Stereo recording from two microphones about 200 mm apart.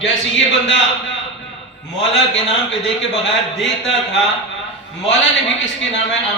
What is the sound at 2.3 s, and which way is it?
Speech, 65° left (ahead or behind).